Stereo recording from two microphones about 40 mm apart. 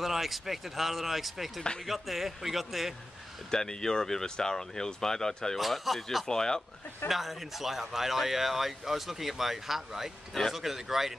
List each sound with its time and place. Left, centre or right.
0.0 s speech: centre
3.4 s speech: centre
5.6 s speech: centre
6.2 s speech: centre
7.1 s speech: centre